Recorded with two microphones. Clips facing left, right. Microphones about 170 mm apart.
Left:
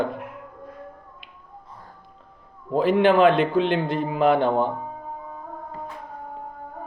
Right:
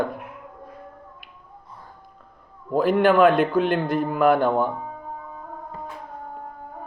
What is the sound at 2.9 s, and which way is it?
Speech, 50° right (ahead or behind).